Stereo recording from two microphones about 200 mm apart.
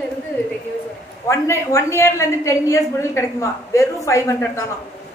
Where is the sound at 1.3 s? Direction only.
15° left (ahead or behind).